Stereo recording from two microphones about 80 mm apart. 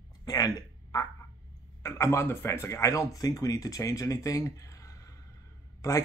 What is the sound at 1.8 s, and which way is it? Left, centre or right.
Speech, left.